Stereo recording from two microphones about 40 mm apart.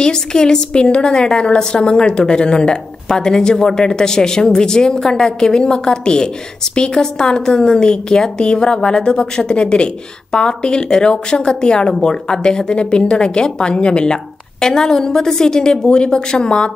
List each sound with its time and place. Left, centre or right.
0.0 s a woman's voice: centre